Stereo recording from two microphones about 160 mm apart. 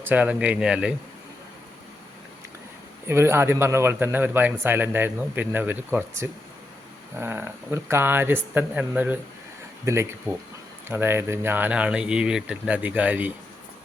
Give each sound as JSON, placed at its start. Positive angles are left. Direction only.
{"t": 0.0, "sound": "speech", "side_deg": -10}
{"t": 3.1, "sound": "speech", "side_deg": -15}